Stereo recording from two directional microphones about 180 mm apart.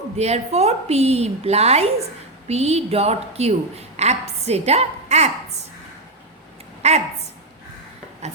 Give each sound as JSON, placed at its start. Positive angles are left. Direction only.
{"t": 0.2, "sound": "a woman's voice", "side_deg": -35}
{"t": 6.8, "sound": "a woman's voice", "side_deg": -40}